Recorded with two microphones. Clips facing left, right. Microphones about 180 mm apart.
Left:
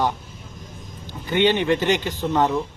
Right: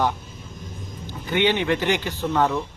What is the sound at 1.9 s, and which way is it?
Speech, 15° left (ahead or behind).